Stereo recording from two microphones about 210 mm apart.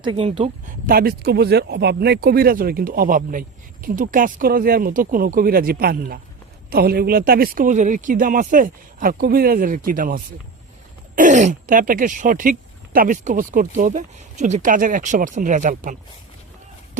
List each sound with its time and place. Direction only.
0.0 s speech: 25° right (ahead or behind)
0.9 s speech: 45° right (ahead or behind)